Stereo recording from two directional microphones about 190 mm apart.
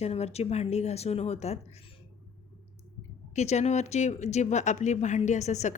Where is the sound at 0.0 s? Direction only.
35° left (ahead or behind).